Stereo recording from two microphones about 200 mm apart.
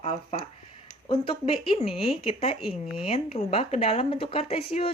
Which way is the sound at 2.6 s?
Centre (ahead or behind).